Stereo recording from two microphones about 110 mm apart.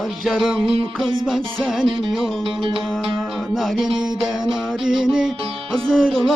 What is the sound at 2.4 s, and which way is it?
Music, 50° right (ahead or behind).